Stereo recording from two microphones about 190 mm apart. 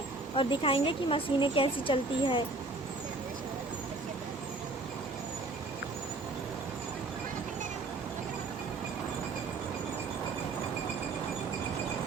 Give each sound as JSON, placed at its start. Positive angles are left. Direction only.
{"t": 0.3, "sound": "a woman's voice", "side_deg": 30}